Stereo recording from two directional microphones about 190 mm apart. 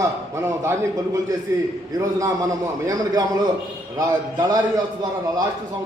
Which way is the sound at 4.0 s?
20° right (ahead or behind).